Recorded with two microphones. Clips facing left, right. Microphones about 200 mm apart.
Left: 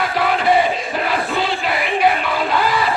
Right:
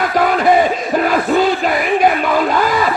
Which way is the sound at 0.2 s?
45° right (ahead or behind).